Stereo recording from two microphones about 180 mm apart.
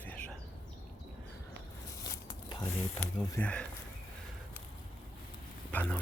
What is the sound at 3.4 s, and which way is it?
Speech, 5° left (ahead or behind).